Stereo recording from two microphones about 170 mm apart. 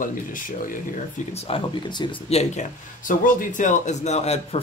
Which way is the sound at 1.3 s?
30° left (ahead or behind).